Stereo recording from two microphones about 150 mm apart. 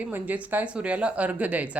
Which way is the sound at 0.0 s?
10° right (ahead or behind).